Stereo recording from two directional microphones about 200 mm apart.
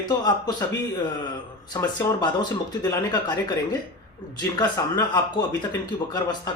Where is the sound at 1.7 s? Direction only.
20° left (ahead or behind).